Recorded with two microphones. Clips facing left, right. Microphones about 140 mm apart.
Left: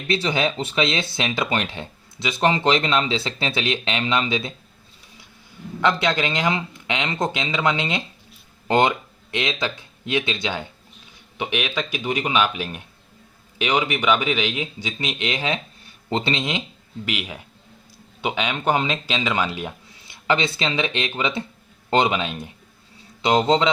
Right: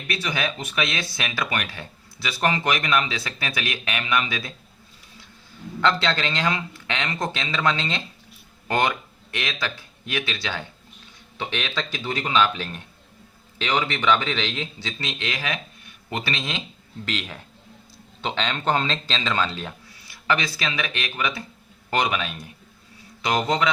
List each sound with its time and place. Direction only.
0.1 s speech: 25° left (ahead or behind)
5.8 s speech: 15° left (ahead or behind)